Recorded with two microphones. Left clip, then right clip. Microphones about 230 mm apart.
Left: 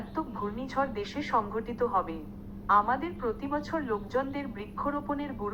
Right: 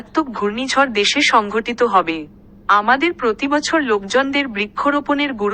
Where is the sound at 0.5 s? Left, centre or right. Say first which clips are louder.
Right 16 dB; right.